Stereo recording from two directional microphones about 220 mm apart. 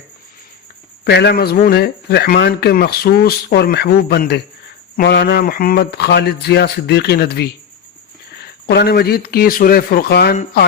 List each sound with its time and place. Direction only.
1.0 s speech: 50° left (ahead or behind)
8.6 s speech: 45° left (ahead or behind)